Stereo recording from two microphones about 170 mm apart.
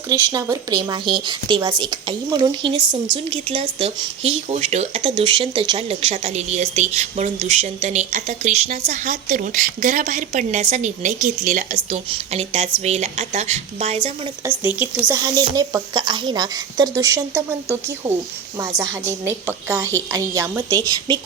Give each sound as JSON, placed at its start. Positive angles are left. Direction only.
{"t": 0.1, "sound": "a woman's voice", "side_deg": -20}
{"t": 14.4, "sound": "a woman's voice", "side_deg": -10}